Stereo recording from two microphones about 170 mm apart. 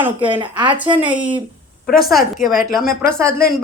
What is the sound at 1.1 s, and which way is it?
A woman's voice, 10° right (ahead or behind).